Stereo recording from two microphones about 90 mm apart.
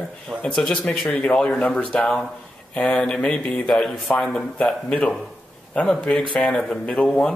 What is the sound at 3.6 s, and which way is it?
Speech, 5° left (ahead or behind).